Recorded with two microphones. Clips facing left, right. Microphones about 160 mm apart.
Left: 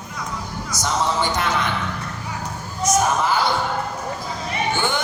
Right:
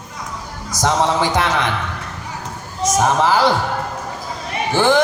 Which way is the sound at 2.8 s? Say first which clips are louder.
Right 3 dB; 90° right.